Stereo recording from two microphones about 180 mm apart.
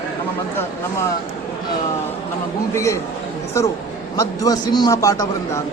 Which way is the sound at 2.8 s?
15° left (ahead or behind).